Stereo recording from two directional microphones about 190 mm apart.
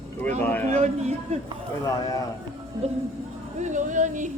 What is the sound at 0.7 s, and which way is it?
Speech, 40° right (ahead or behind).